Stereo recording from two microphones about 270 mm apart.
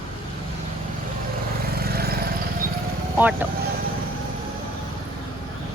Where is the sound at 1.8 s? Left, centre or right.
Right.